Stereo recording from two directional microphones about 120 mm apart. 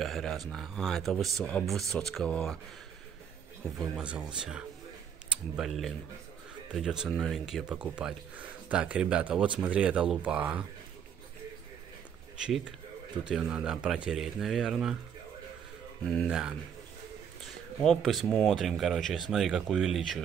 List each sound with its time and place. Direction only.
0.0 s speech: centre (ahead or behind)
3.7 s speech: centre (ahead or behind)
12.4 s speech: 5° right (ahead or behind)
16.3 s speech: 5° right (ahead or behind)